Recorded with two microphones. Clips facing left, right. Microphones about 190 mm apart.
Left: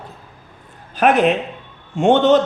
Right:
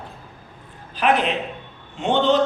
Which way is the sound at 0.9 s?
45° left (ahead or behind).